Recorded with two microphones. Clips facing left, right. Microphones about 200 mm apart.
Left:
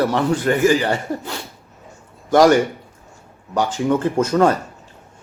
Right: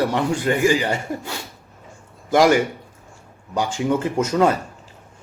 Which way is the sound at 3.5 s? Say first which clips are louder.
Left 2 dB; 10° right (ahead or behind).